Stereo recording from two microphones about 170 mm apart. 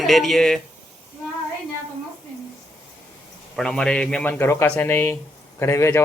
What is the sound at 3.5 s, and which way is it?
Speech, 5° left (ahead or behind).